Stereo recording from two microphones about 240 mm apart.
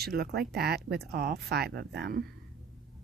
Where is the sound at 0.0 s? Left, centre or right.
Right.